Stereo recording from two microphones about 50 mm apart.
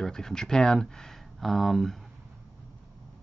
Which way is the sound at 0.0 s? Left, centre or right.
Centre.